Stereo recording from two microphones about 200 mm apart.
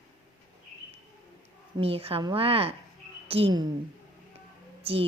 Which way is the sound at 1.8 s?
30° right (ahead or behind).